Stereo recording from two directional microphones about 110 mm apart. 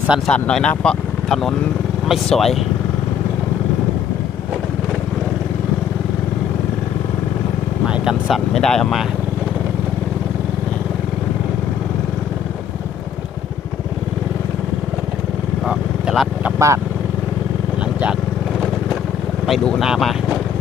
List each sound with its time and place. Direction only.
0.3 s speech: 10° left (ahead or behind)
7.9 s speech: 5° right (ahead or behind)
15.6 s vehicle: 5° right (ahead or behind)
16.6 s speech: 25° right (ahead or behind)
19.5 s speech: centre (ahead or behind)